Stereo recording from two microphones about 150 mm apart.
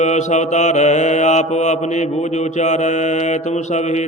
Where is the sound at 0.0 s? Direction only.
50° left (ahead or behind).